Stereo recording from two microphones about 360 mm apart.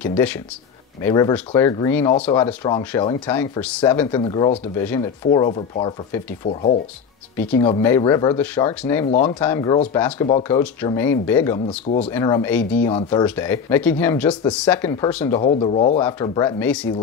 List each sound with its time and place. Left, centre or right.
0.0 s speech: centre
10.6 s speech: centre